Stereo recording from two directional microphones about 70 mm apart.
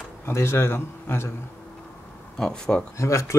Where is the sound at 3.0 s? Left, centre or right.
Left.